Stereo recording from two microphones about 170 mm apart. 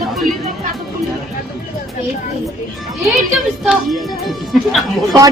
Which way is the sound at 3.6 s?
Centre (ahead or behind).